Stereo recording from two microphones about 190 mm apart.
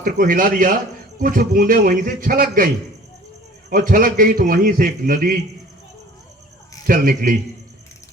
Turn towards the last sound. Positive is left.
turn(degrees=-45)  # may be behind; listen again after turning